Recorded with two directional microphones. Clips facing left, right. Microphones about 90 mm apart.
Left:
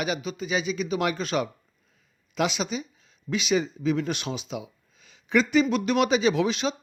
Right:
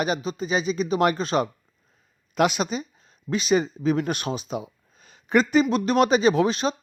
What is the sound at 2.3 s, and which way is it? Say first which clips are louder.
Speech: right 4 dB; 50° right (ahead or behind).